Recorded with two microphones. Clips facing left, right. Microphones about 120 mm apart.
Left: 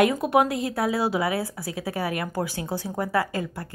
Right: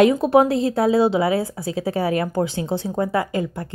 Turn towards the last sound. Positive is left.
turn(degrees=-20)  # may be behind; listen again after turning